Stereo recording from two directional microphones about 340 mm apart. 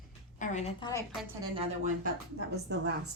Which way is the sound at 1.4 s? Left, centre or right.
Centre.